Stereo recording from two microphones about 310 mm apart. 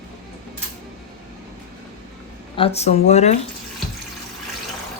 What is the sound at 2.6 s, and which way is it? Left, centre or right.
Speech, centre.